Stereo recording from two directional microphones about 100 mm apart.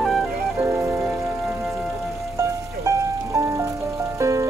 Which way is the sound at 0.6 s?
25° right (ahead or behind).